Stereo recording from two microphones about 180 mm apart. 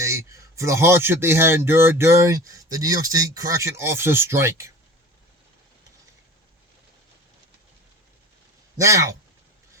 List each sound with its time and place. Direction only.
0.0 s speech: 15° right (ahead or behind)
8.8 s speech: 15° right (ahead or behind)